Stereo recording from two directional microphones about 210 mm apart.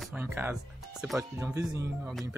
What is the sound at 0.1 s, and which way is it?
Speech, 10° right (ahead or behind).